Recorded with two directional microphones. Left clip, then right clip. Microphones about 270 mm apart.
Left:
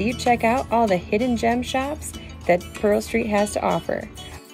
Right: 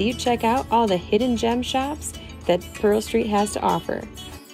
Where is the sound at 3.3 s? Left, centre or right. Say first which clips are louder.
Left 4 dB; centre.